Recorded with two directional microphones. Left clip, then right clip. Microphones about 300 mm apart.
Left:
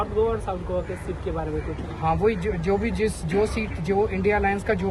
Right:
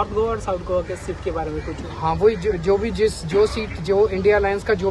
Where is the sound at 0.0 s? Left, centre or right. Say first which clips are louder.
Right 2 dB; right.